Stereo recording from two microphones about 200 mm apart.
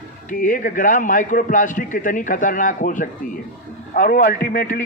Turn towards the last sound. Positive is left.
turn(degrees=45)  # may be behind; listen again after turning